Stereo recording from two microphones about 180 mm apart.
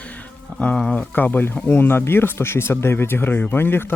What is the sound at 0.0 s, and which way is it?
Speech, 10° left (ahead or behind).